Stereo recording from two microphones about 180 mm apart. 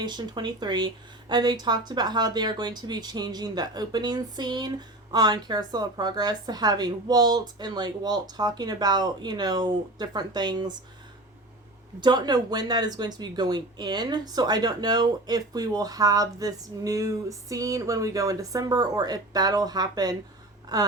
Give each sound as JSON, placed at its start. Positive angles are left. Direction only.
{"t": 0.0, "sound": "speech", "side_deg": -25}
{"t": 11.9, "sound": "speech", "side_deg": -25}